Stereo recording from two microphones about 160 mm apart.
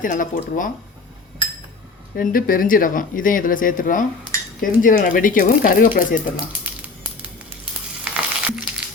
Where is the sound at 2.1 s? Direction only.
60° left (ahead or behind).